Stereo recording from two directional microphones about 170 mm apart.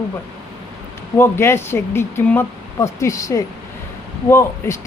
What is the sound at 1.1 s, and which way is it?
Speech, 15° left (ahead or behind).